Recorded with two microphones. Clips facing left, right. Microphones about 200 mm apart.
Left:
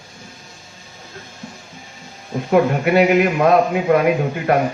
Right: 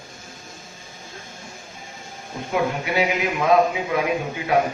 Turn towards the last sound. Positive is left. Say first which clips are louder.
# left 6 dB
turn(degrees=55)  # may be behind; listen again after turning